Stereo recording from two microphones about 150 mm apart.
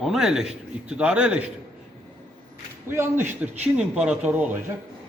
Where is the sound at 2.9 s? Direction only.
15° right (ahead or behind).